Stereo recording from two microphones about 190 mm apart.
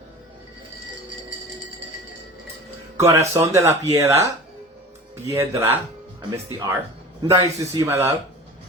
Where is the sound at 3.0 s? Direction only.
15° right (ahead or behind).